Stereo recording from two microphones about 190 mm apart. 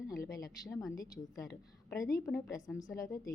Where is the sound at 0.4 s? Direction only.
20° left (ahead or behind).